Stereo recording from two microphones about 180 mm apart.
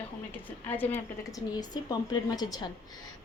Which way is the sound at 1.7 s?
20° left (ahead or behind).